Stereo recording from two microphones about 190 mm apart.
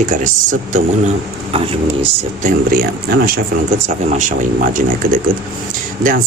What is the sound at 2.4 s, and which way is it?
Speech, 50° right (ahead or behind).